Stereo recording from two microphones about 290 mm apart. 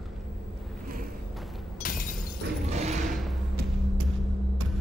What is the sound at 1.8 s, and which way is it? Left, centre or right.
Shatter, left.